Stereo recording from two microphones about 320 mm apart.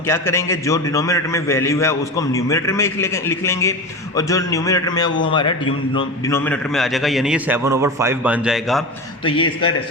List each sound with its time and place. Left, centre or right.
0.1 s a man's voice: centre
9.2 s a man's voice: centre